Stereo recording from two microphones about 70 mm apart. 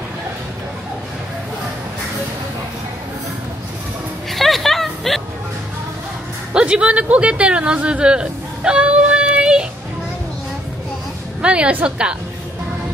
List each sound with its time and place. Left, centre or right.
4.3 s a sound: centre
6.5 s speech: centre
11.4 s a woman's voice: centre